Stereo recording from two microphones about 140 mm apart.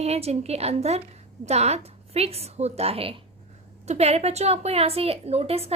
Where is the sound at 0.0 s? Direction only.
50° right (ahead or behind).